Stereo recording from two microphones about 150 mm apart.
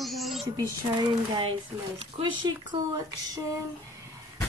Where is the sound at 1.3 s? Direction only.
35° right (ahead or behind).